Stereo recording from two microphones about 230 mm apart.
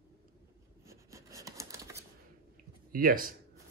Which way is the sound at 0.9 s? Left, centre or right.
Centre.